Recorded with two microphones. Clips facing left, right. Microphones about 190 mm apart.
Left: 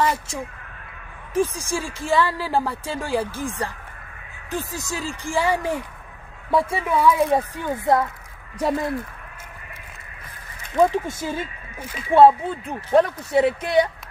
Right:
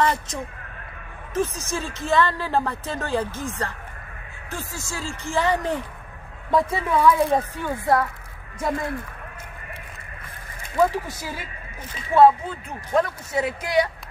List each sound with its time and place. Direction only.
0.0 s speech: 5° left (ahead or behind)
8.5 s speech: 35° left (ahead or behind)
11.1 s a woman's voice: 25° left (ahead or behind)